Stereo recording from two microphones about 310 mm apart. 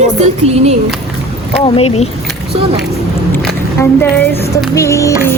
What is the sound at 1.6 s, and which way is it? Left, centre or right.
Speech, centre.